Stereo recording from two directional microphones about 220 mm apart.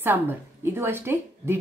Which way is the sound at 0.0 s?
10° right (ahead or behind).